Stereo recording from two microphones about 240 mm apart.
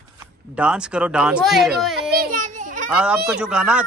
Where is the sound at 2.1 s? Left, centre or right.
Right.